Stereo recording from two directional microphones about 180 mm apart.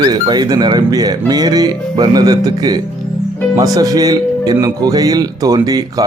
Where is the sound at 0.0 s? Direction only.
25° right (ahead or behind).